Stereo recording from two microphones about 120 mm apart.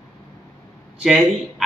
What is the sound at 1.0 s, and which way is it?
Speech, centre (ahead or behind).